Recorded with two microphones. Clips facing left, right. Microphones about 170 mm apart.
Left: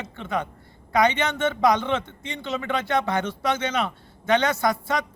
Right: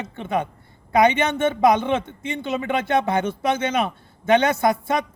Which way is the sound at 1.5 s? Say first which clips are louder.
Right 3 dB; 25° right (ahead or behind).